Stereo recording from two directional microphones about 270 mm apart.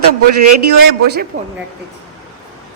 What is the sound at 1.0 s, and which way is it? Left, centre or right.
Speech, right.